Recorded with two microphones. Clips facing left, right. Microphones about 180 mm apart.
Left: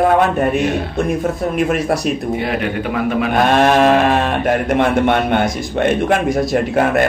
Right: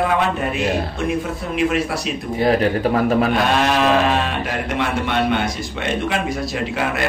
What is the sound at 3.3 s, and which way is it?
A man's voice, 50° left (ahead or behind).